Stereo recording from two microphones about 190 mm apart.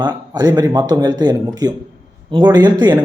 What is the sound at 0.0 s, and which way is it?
A man's voice, 20° right (ahead or behind).